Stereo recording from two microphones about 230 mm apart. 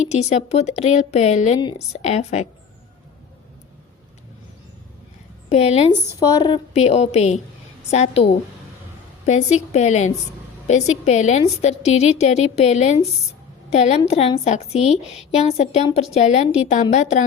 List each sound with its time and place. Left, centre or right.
0.0 s a woman's voice: left
5.5 s a woman's voice: left